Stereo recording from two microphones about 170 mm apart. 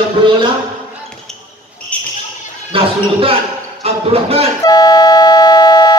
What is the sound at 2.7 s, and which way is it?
Speech, 35° right (ahead or behind).